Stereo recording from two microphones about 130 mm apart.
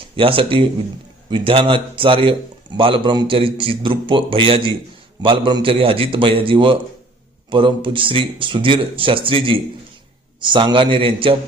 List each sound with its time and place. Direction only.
0.0 s a man's voice: 45° right (ahead or behind)